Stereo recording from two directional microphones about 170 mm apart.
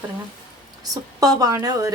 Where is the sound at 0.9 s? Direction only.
20° right (ahead or behind).